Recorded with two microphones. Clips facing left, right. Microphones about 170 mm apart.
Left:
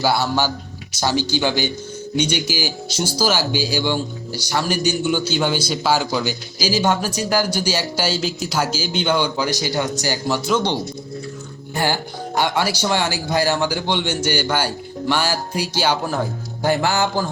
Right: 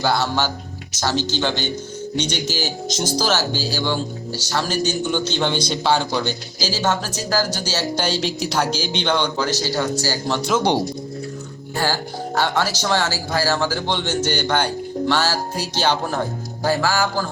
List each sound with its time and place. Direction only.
0.0 s speech: 10° left (ahead or behind)
10.2 s speech: 5° left (ahead or behind)
11.8 s speech: 15° left (ahead or behind)
16.6 s music: 20° left (ahead or behind)